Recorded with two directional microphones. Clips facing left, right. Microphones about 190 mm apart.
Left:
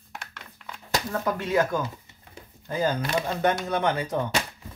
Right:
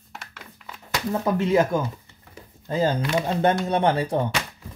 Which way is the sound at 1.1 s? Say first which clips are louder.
Right 7 dB; 25° right (ahead or behind).